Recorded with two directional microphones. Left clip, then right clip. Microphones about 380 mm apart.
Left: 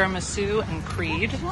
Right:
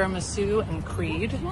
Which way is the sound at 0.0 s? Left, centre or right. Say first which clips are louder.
Left 2 dB; centre.